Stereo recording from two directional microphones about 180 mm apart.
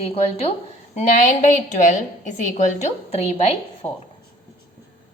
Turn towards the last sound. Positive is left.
turn(degrees=35)  # may be behind; listen again after turning